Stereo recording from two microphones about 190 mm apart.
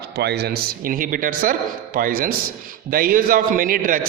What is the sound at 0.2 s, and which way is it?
A man's voice, 60° right (ahead or behind).